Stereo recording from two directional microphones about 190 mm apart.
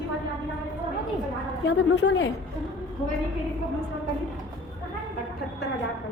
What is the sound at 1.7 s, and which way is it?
Speech, 65° left (ahead or behind).